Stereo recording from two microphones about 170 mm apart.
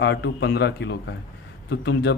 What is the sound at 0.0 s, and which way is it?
Speech, 90° left.